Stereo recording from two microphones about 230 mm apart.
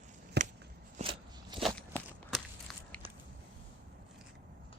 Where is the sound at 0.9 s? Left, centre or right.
Right.